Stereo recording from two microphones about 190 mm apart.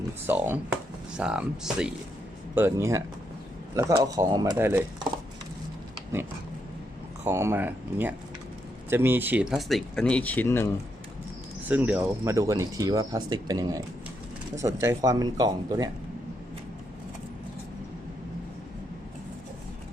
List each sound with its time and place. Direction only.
0.3 s speech: 10° right (ahead or behind)
4.5 s speech: 10° right (ahead or behind)
7.3 s speech: 15° right (ahead or behind); by 10.7 s 10° left (ahead or behind)
11.7 s speech: 10° right (ahead or behind)